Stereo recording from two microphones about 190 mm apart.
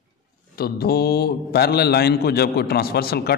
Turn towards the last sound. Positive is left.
turn(degrees=55)  # may be behind; listen again after turning